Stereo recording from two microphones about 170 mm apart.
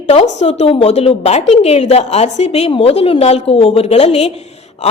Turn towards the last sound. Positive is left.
turn(degrees=40)  # may be behind; listen again after turning